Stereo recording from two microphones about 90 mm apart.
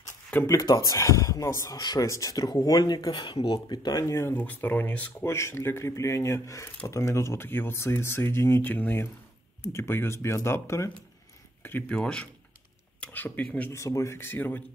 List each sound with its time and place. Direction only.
0.3 s speech: 15° left (ahead or behind)
0.7 s speech: 40° left (ahead or behind)
1.8 s speech: 50° left (ahead or behind)
2.0 s speech: 40° left (ahead or behind)
4.0 s speech: 30° left (ahead or behind)
4.3 s speech: 20° left (ahead or behind)
5.2 s speech: 30° left (ahead or behind)
11.9 s speech: 10° left (ahead or behind)
13.7 s speech: 35° left (ahead or behind)